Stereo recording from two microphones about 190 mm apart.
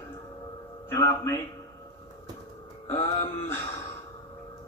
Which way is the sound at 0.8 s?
15° left (ahead or behind).